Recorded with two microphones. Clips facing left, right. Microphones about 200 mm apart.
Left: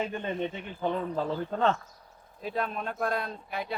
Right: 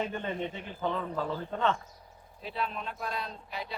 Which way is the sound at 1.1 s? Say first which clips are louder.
Left 3 dB; 35° left (ahead or behind).